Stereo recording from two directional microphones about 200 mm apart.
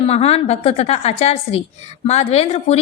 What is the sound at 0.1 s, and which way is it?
A woman's voice, 30° left (ahead or behind).